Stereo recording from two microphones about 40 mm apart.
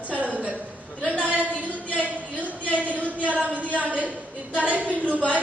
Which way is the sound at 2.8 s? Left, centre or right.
Right.